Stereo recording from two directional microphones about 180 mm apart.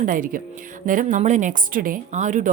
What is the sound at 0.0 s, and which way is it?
Speech, 50° right (ahead or behind).